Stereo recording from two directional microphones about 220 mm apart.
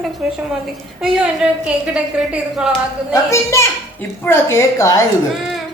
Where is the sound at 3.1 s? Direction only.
15° left (ahead or behind).